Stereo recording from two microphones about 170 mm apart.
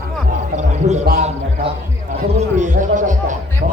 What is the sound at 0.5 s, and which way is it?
Speech, 45° right (ahead or behind).